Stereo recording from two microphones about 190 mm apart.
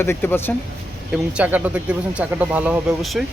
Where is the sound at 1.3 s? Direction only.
5° right (ahead or behind).